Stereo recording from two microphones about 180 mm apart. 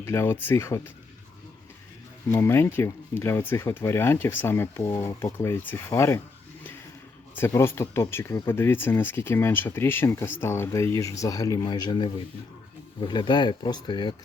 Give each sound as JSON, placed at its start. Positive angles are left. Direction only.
{"t": 0.0, "sound": "speech", "side_deg": 15}
{"t": 2.3, "sound": "speech", "side_deg": 15}
{"t": 7.3, "sound": "speech", "side_deg": 15}